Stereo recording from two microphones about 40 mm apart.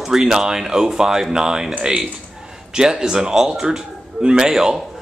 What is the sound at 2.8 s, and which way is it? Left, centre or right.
Speech, centre.